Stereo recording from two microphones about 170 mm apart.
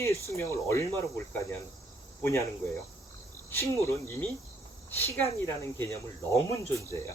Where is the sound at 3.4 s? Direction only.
15° left (ahead or behind).